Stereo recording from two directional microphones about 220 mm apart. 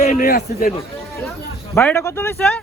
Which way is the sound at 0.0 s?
40° left (ahead or behind).